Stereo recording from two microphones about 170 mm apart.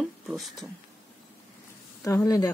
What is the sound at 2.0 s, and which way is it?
Speech, 20° left (ahead or behind).